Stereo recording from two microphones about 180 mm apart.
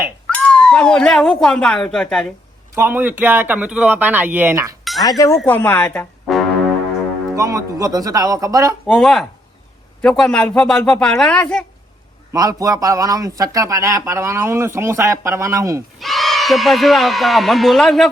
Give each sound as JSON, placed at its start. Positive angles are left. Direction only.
{"t": 0.3, "sound": "speech", "side_deg": 5}
{"t": 2.7, "sound": "speech", "side_deg": -10}
{"t": 5.0, "sound": "speech", "side_deg": 20}
{"t": 7.3, "sound": "speech", "side_deg": -20}
{"t": 8.9, "sound": "speech", "side_deg": 0}
{"t": 12.3, "sound": "speech", "side_deg": -20}
{"t": 16.0, "sound": "speech", "side_deg": 0}